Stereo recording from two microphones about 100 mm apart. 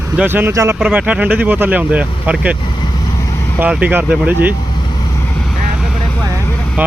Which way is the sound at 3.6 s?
15° right (ahead or behind).